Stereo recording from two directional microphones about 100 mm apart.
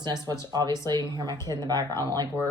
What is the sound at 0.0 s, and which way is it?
Speech, 45° right (ahead or behind).